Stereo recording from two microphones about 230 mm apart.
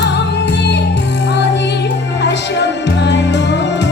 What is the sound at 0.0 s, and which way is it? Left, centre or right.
Music, left.